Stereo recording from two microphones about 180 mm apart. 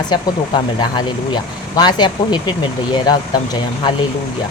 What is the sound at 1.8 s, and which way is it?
Speech, 25° left (ahead or behind).